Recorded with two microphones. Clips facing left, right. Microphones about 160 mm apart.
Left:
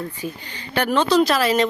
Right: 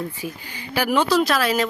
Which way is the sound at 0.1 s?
10° right (ahead or behind).